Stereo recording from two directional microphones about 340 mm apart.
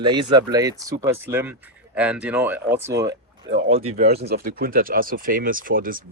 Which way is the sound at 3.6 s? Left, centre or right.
Centre.